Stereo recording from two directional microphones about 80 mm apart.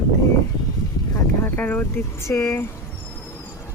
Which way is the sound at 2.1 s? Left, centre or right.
Left.